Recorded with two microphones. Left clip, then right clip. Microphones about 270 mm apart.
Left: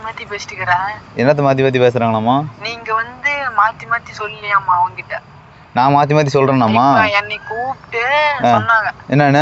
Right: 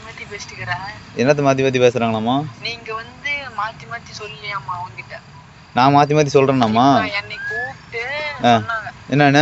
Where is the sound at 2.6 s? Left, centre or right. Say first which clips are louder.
Left 8 dB; centre.